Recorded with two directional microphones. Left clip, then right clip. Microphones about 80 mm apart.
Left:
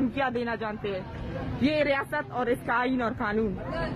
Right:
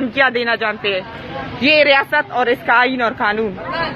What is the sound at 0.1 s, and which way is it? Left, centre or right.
A woman's voice, centre.